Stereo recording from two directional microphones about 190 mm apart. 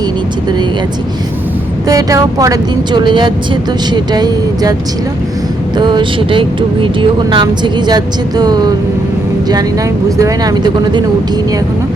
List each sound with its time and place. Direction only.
1.9 s speech: 15° right (ahead or behind)
5.7 s speech: 25° right (ahead or behind)
10.2 s speech: 20° right (ahead or behind)